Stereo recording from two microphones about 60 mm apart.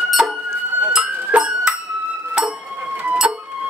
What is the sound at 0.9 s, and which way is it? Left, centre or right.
Music, centre.